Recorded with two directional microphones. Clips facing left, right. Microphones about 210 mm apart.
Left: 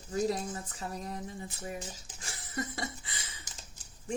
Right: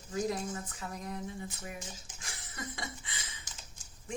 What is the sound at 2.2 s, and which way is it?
Speech, 35° left (ahead or behind).